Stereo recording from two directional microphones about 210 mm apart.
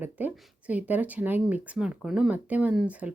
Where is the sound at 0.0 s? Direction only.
10° right (ahead or behind).